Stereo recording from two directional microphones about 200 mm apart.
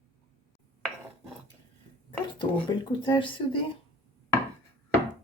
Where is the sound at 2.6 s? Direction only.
25° left (ahead or behind).